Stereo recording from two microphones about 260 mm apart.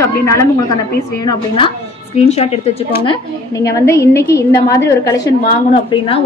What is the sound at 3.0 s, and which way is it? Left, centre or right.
A woman's voice, centre.